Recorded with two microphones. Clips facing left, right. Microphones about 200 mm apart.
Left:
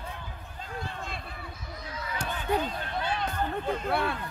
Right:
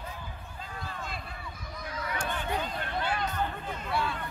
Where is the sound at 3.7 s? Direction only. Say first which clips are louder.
Left 4 dB; 60° left (ahead or behind).